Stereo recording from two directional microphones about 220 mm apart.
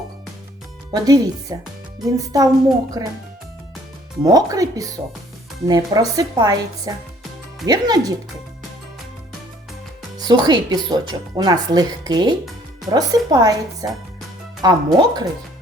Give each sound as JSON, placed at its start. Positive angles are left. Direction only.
{"t": 0.9, "sound": "a woman's voice", "side_deg": -15}
{"t": 4.2, "sound": "a woman's voice", "side_deg": -15}
{"t": 10.2, "sound": "a woman's voice", "side_deg": -20}